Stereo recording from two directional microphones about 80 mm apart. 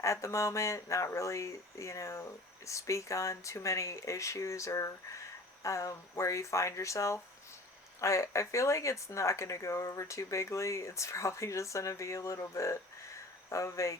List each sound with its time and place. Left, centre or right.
0.0 s speech: left